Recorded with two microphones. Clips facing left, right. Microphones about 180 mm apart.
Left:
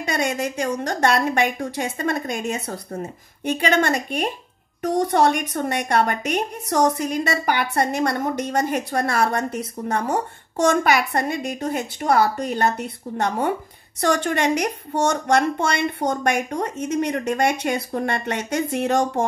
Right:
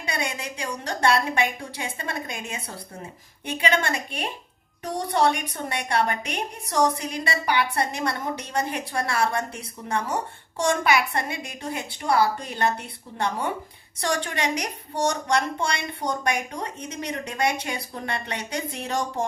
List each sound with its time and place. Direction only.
0.2 s a woman's voice: 45° left (ahead or behind)